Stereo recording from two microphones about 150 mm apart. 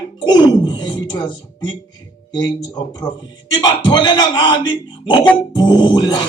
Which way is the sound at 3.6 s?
30° left (ahead or behind).